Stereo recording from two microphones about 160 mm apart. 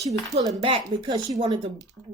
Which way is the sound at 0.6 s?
30° right (ahead or behind).